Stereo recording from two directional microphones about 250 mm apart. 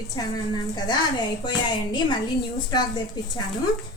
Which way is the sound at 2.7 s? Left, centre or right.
Centre.